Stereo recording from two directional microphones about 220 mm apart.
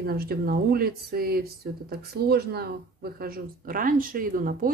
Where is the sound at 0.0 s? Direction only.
45° right (ahead or behind).